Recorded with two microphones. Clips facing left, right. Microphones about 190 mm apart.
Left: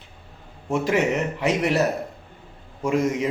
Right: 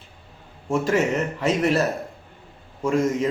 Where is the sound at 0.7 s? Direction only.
15° left (ahead or behind).